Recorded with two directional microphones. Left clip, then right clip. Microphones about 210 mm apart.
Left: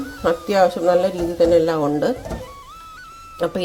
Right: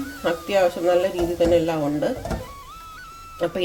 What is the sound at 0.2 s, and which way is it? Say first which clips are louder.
Speech: left 4 dB; 30° left (ahead or behind).